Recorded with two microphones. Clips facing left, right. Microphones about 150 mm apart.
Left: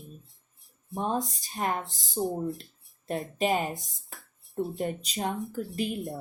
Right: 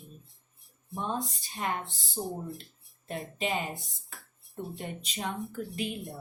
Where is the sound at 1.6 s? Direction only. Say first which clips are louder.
Left 3 dB; 50° left (ahead or behind).